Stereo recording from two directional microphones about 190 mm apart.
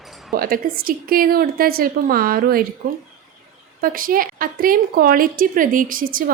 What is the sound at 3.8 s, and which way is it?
A woman's voice, 50° right (ahead or behind).